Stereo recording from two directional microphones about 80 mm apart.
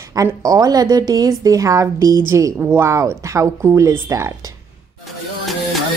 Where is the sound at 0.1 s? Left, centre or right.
Right.